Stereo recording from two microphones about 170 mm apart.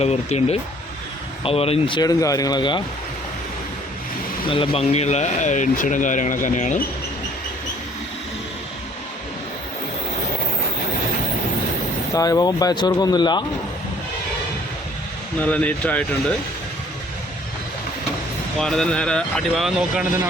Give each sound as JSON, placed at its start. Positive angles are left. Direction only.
{"t": 0.0, "sound": "speech", "side_deg": 40}
{"t": 4.5, "sound": "speech", "side_deg": 30}
{"t": 12.1, "sound": "speech", "side_deg": 20}
{"t": 15.4, "sound": "speech", "side_deg": 10}
{"t": 18.6, "sound": "speech", "side_deg": 5}